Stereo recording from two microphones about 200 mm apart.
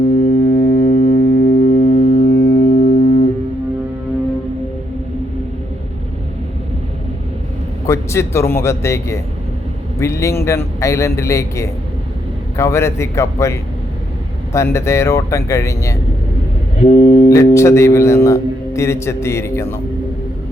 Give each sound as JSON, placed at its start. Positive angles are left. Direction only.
{"t": 0.4, "sound": "music", "side_deg": 45}
{"t": 7.9, "sound": "a man's voice", "side_deg": 15}
{"t": 16.8, "sound": "a sound", "side_deg": 35}
{"t": 17.2, "sound": "a man's voice", "side_deg": 15}